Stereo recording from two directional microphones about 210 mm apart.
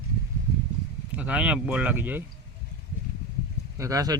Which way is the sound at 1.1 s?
5° right (ahead or behind).